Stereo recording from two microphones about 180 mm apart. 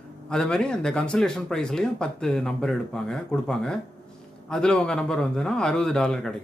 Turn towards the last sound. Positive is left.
turn(degrees=5)  # may be behind; listen again after turning